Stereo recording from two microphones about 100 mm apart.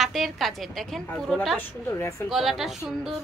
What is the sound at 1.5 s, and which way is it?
Speech, 25° left (ahead or behind).